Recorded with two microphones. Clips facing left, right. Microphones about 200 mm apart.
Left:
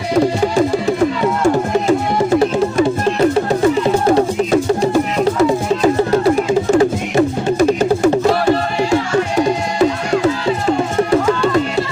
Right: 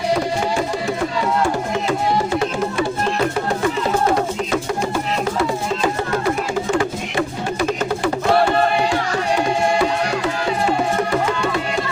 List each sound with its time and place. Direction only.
4.1 s music: 30° left (ahead or behind)